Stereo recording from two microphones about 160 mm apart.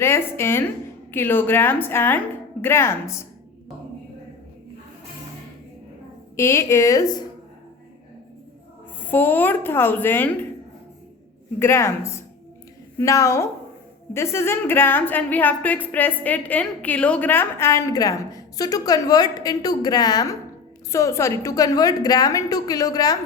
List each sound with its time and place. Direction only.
0.0 s a woman's voice: 15° left (ahead or behind)
6.3 s a woman's voice: 15° left (ahead or behind)
9.0 s a woman's voice: 10° left (ahead or behind)
11.6 s a woman's voice: 15° left (ahead or behind)